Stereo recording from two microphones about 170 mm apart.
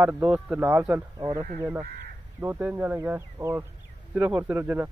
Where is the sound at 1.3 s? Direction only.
45° right (ahead or behind).